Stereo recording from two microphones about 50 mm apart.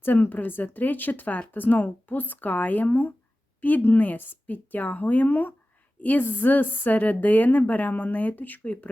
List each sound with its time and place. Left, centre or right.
0.0 s a woman's voice: left